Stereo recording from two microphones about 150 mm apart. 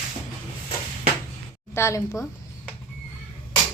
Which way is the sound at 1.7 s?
15° left (ahead or behind).